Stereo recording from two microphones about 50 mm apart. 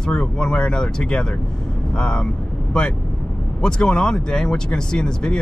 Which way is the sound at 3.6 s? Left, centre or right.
Centre.